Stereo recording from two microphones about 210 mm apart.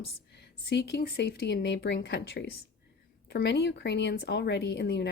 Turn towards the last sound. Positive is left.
turn(degrees=55)  # may be behind; listen again after turning